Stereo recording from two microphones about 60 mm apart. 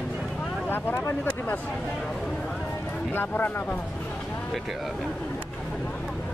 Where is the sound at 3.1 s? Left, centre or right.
Left.